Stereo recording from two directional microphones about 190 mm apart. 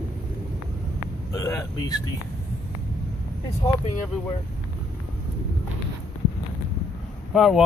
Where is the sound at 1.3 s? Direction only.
20° left (ahead or behind).